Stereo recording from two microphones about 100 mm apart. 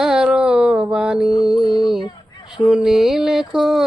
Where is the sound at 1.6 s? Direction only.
50° left (ahead or behind).